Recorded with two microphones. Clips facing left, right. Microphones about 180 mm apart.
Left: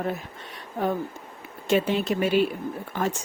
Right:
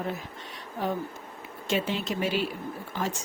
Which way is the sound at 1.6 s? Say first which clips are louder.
Left 6 dB; 55° left (ahead or behind).